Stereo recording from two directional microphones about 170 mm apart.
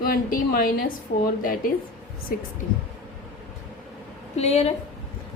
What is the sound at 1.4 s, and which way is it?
Speech, 55° left (ahead or behind).